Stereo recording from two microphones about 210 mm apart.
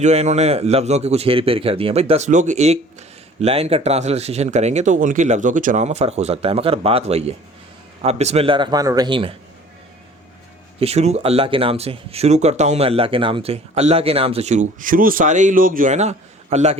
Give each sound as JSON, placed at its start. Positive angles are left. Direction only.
{"t": 0.0, "sound": "speech", "side_deg": -35}
{"t": 10.8, "sound": "speech", "side_deg": -30}